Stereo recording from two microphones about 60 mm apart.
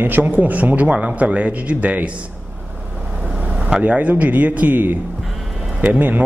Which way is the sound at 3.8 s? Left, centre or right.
Right.